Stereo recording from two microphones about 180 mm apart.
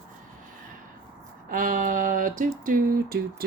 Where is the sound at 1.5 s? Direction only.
50° right (ahead or behind).